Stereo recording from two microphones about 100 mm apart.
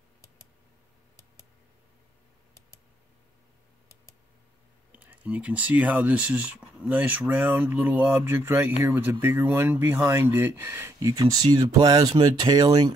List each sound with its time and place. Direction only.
4.9 s speech: 15° right (ahead or behind)
11.0 s speech: 35° right (ahead or behind)